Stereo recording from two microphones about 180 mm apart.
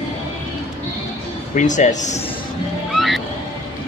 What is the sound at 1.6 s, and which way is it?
Speech, 40° left (ahead or behind).